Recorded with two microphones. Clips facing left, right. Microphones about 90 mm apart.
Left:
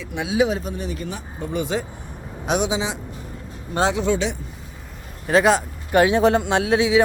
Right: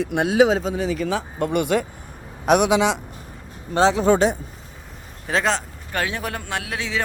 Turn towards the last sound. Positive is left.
turn(degrees=15)  # may be behind; listen again after turning